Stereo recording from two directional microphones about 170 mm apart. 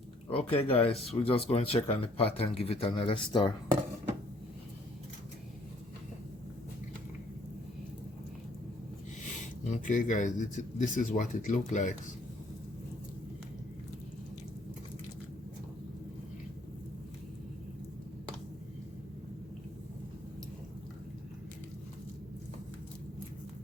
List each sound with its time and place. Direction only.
0.3 s speech: 35° left (ahead or behind)
9.6 s speech: 45° left (ahead or behind)